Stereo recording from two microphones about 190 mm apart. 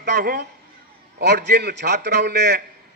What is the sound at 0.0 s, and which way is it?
A man's voice, 60° right (ahead or behind).